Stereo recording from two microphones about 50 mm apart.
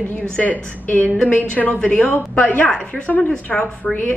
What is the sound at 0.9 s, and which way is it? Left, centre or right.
Speech, left.